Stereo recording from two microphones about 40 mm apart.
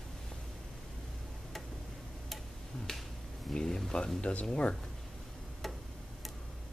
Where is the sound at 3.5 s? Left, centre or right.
Centre.